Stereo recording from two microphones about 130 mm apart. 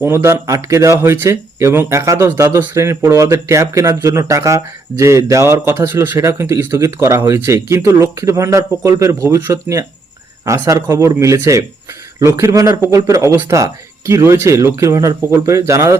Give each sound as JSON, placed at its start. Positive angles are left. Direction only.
{"t": 0.0, "sound": "speech", "side_deg": -20}